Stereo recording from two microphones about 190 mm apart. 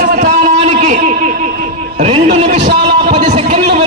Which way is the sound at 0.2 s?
40° right (ahead or behind).